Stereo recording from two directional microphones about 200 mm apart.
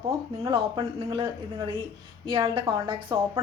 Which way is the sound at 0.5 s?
25° right (ahead or behind).